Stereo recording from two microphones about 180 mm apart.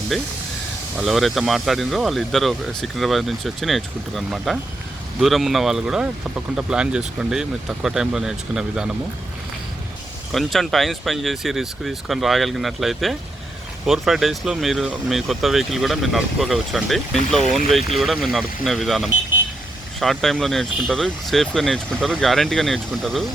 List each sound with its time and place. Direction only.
0.1 s speech: centre (ahead or behind)
10.3 s speech: centre (ahead or behind)